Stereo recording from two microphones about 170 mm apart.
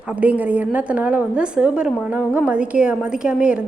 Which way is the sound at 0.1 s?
10° right (ahead or behind).